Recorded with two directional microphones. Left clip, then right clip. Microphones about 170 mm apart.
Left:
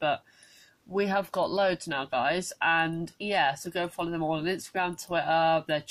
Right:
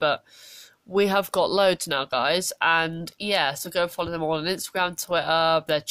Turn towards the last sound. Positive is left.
turn(degrees=-40)  # may be behind; listen again after turning